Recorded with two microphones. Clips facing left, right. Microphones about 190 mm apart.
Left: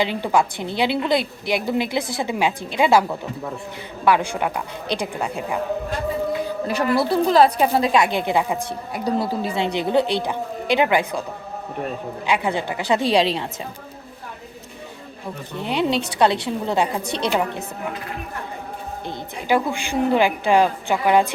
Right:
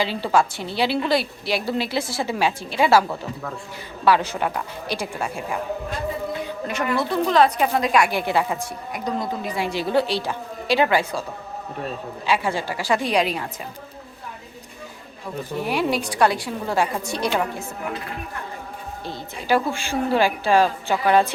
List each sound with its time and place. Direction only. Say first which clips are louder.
0.0 s a woman's voice: left 1 dB; 20° left (ahead or behind)
6.7 s a woman's voice: left 4 dB; 35° left (ahead or behind); by 8.5 s 20° left (ahead or behind)
8.9 s a woman's voice: left 4 dB; 35° left (ahead or behind); by 11.2 s 15° left (ahead or behind)
12.2 s a woman's voice: left 1 dB; 15° left (ahead or behind)
15.6 s a woman's voice: left 2 dB; 20° left (ahead or behind)
19.0 s a woman's voice: left 1 dB; 15° left (ahead or behind)